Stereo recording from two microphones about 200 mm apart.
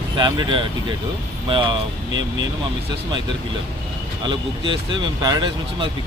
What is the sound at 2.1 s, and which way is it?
Speech, 70° right (ahead or behind).